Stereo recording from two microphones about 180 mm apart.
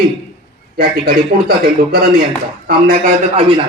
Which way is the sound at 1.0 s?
60° right (ahead or behind).